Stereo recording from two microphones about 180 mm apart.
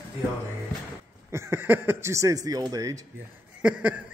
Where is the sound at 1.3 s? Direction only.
15° right (ahead or behind).